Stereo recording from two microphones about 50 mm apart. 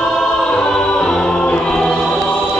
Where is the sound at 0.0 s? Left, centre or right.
Centre.